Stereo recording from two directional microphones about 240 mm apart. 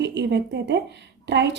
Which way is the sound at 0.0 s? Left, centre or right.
Right.